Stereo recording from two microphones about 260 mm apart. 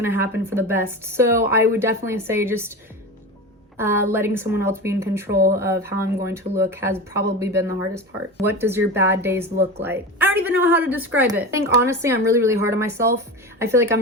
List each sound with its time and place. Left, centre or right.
0.0 s a woman's voice: centre
3.8 s a woman's voice: centre
5.3 s speech: right
5.5 s a woman's voice: centre